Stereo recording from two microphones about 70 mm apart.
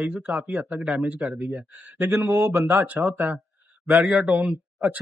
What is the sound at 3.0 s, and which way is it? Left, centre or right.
Speech, centre.